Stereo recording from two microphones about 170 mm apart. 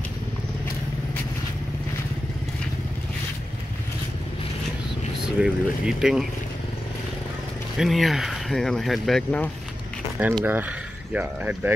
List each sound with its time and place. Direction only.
5.2 s speech: 5° right (ahead or behind)
7.7 s speech: centre (ahead or behind)
10.4 s speech: 10° right (ahead or behind)